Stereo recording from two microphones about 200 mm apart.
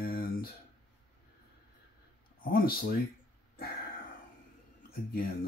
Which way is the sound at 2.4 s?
45° left (ahead or behind).